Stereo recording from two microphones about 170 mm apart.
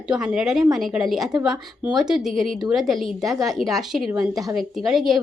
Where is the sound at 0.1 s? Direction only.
5° right (ahead or behind).